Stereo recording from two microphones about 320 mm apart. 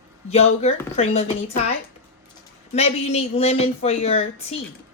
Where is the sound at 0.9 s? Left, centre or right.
Centre.